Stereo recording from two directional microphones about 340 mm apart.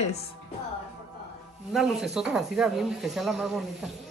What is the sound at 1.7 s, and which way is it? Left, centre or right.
Speech, centre.